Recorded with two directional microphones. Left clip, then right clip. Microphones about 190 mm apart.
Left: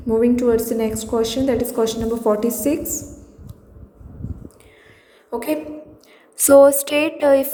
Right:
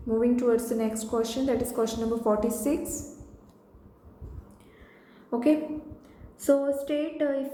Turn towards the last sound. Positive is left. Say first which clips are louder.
# left 13 dB
turn(degrees=50)  # may be behind; listen again after turning